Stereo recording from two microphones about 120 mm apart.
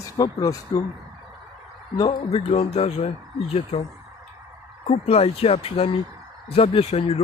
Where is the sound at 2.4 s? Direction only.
60° left (ahead or behind).